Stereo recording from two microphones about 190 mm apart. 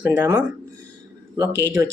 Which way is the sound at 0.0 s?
10° right (ahead or behind).